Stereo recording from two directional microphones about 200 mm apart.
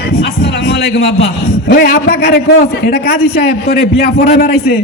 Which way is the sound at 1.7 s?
50° left (ahead or behind).